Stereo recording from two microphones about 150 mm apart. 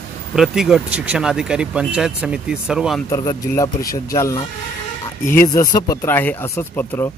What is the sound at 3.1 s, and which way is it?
Speech, 20° left (ahead or behind).